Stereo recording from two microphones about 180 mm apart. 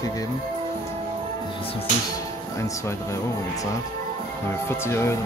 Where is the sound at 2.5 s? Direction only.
15° left (ahead or behind).